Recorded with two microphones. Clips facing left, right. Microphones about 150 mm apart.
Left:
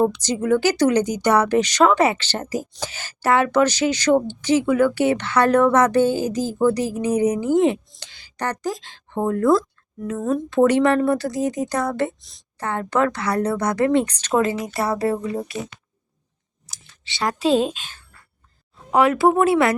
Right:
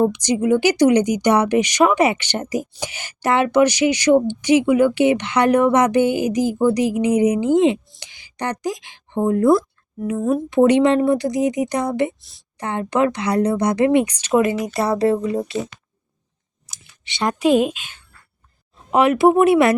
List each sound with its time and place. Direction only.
0.1 s a woman's voice: 15° right (ahead or behind)
12.2 s a woman's voice: centre (ahead or behind)
12.5 s speech: 20° right (ahead or behind)
16.6 s clicking: 15° right (ahead or behind)
18.9 s speech: 20° right (ahead or behind)